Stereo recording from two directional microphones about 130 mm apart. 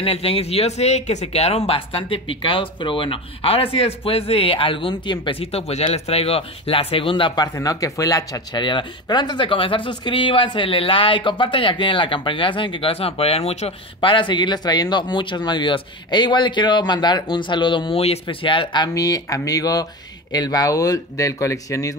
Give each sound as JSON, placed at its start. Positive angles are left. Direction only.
{"t": 0.0, "sound": "speech", "side_deg": 45}
{"t": 7.5, "sound": "speech", "side_deg": 25}